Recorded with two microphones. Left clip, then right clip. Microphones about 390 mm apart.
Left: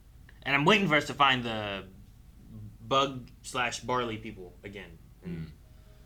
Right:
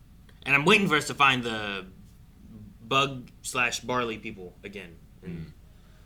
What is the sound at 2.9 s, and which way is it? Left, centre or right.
Speech, left.